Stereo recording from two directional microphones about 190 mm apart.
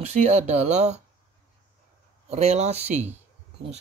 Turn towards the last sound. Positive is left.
turn(degrees=-35)  # may be behind; listen again after turning